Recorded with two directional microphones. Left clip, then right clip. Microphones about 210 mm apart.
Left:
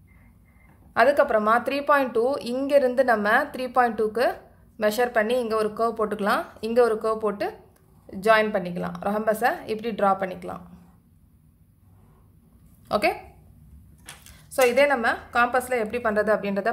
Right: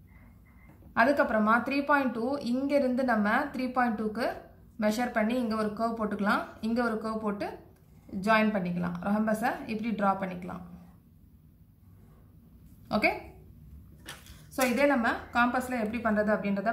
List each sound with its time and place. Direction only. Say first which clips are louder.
0.9 s a woman's voice: left 6 dB; 50° left (ahead or behind)
12.8 s a woman's voice: left 5 dB; 50° left (ahead or behind)
14.5 s a woman's voice: left 7 dB; 50° left (ahead or behind)